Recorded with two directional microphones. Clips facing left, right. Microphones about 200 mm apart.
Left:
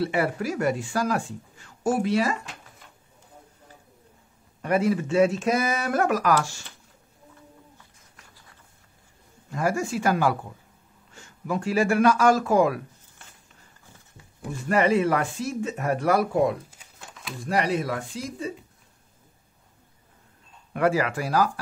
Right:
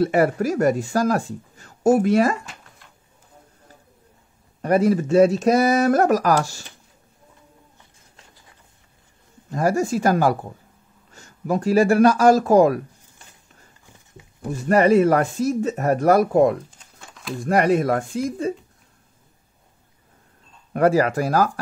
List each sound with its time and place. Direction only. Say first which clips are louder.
0.0 s speech: right 7 dB; 45° right (ahead or behind)
4.6 s speech: right 5 dB; 40° right (ahead or behind)
7.7 s a sound: right 1 dB; 20° right (ahead or behind)
9.5 s speech: right 5 dB; 40° right (ahead or behind)
14.2 s a sound: right 3 dB; 20° right (ahead or behind)
14.5 s speech: right 6 dB; 40° right (ahead or behind)
16.7 s a sound: even; centre (ahead or behind)
17.4 s speech: right 7 dB; 50° right (ahead or behind)
20.7 s speech: right 6 dB; 40° right (ahead or behind)